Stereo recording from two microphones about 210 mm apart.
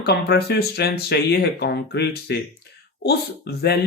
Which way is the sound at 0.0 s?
50° left (ahead or behind).